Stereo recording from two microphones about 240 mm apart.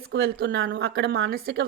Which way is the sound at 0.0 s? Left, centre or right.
Right.